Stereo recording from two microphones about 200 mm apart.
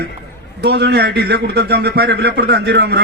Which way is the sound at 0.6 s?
55° right (ahead or behind).